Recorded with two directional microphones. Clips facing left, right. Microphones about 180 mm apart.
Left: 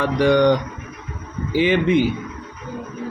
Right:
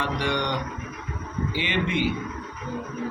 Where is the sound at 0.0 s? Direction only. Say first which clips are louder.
Left 11 dB; 40° left (ahead or behind).